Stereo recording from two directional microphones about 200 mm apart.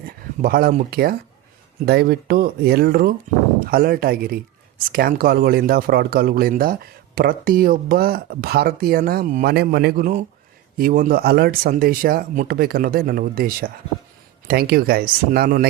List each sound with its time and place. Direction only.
0.4 s speech: 45° right (ahead or behind)